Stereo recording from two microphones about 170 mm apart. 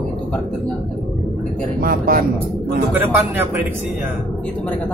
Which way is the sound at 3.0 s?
10° right (ahead or behind).